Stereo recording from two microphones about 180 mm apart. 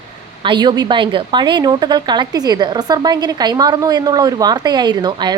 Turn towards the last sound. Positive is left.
turn(degrees=-25)  # may be behind; listen again after turning